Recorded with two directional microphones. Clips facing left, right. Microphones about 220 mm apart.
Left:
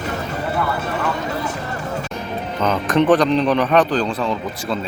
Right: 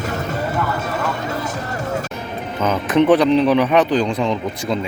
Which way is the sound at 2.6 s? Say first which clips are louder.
Right 1 dB; 10° right (ahead or behind).